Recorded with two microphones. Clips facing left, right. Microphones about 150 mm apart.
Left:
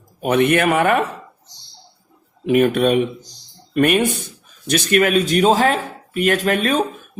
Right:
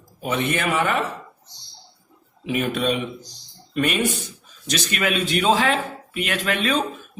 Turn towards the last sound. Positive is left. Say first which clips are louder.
# left 5 dB
turn(degrees=45)  # may be behind; listen again after turning